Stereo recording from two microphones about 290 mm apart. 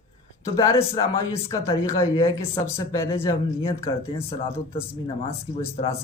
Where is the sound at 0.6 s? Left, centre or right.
Centre.